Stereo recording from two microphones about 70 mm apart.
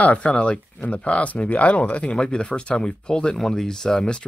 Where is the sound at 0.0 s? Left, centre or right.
Centre.